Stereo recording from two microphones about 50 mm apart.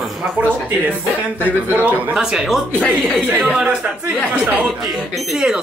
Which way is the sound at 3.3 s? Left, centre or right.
Centre.